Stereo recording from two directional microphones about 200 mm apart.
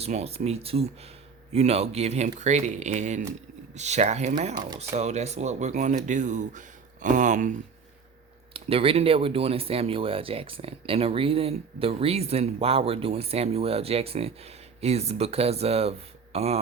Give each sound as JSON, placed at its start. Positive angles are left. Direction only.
{"t": 0.0, "sound": "speech", "side_deg": -30}
{"t": 8.5, "sound": "speech", "side_deg": -30}